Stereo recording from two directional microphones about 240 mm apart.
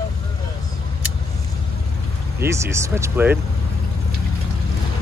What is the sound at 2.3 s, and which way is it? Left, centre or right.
Speech, centre.